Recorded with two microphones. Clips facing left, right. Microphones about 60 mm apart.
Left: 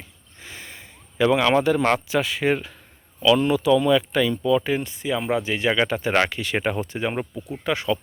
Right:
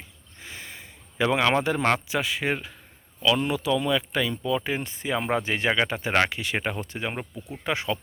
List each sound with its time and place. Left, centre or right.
0.3 s a sound: centre
1.2 s speech: centre
2.0 s speech: centre
4.8 s speech: right
5.7 s speech: centre
6.6 s speech: centre
7.6 s speech: right